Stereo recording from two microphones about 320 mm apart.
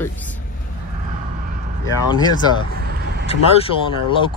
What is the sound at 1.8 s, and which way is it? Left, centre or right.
Speech, centre.